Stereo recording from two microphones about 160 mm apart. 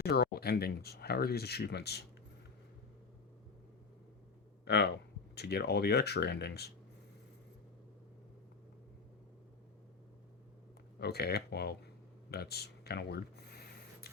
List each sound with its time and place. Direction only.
0.0 s speech: 80° left
4.6 s speech: 90° left
11.0 s speech: 90° left
12.3 s a sound: 80° left